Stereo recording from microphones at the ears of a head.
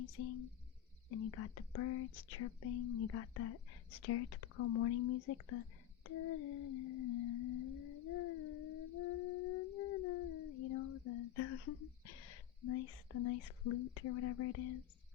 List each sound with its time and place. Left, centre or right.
0.0 s speech: left